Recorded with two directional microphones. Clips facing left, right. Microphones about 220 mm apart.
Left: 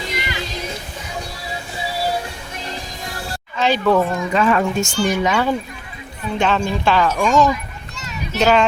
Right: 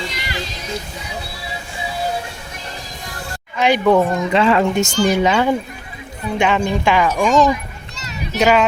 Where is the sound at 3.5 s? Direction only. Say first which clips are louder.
Right 2 dB; 15° right (ahead or behind).